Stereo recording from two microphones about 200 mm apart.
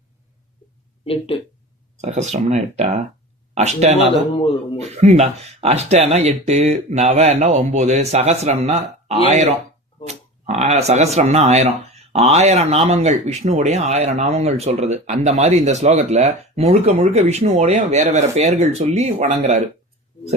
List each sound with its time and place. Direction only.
1.0 s speech: 30° left (ahead or behind)
2.0 s speech: 35° right (ahead or behind)
4.4 s speech: 30° left (ahead or behind)
4.8 s speech: 35° right (ahead or behind)